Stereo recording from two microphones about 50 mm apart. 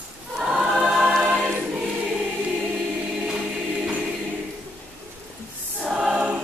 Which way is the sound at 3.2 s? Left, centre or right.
Centre.